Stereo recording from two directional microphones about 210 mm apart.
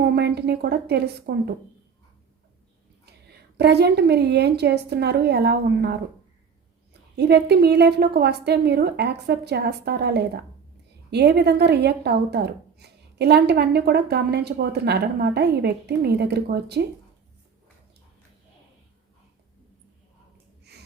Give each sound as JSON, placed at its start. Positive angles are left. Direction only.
{"t": 0.0, "sound": "a woman's voice", "side_deg": -50}
{"t": 3.6, "sound": "a woman's voice", "side_deg": -50}
{"t": 7.2, "sound": "a woman's voice", "side_deg": -50}